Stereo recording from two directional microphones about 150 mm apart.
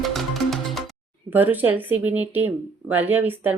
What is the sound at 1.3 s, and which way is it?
Speech, 10° right (ahead or behind).